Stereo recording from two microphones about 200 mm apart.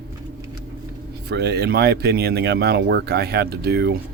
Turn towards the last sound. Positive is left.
turn(degrees=-55)  # may be behind; listen again after turning